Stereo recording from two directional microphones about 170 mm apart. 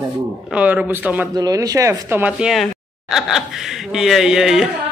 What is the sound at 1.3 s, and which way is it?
Speech, 20° right (ahead or behind).